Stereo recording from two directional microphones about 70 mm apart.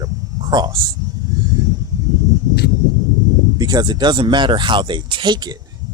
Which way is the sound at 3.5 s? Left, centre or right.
Right.